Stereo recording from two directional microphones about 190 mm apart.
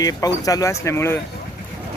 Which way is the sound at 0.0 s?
20° left (ahead or behind).